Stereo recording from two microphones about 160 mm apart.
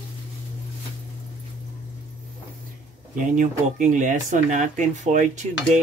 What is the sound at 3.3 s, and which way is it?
Speech, 55° right (ahead or behind).